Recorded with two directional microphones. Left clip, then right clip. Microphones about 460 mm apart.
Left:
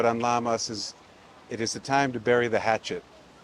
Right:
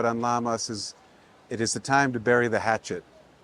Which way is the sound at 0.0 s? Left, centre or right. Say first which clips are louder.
Left 1 dB; right.